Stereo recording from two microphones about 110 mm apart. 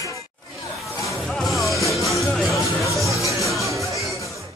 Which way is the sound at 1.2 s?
Centre (ahead or behind).